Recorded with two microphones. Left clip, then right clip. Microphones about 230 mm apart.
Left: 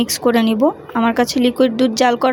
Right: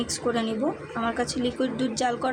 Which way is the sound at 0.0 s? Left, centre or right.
Left.